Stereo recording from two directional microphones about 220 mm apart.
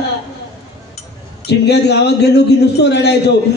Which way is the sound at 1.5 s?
50° left (ahead or behind).